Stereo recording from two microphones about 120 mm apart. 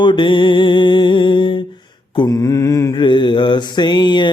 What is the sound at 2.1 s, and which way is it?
Mantra, 30° left (ahead or behind).